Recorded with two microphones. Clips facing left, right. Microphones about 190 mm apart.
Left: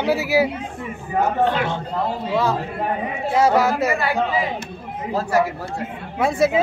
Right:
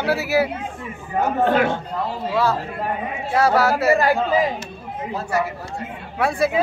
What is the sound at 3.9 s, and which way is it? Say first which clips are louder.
Speech: right 3 dB; 40° right (ahead or behind).